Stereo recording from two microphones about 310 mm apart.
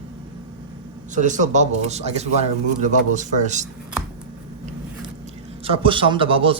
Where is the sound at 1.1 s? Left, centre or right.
Right.